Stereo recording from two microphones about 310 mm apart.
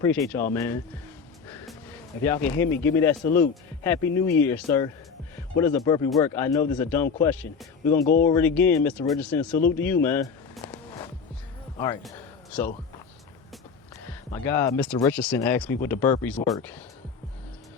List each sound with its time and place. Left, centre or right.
0.0 s a man's voice: centre
1.5 s music: centre
2.2 s a man's voice: centre
7.9 s speech: left
8.3 s a man's voice: centre
9.7 s a sound: centre
12.5 s speech: centre
14.1 s speech: centre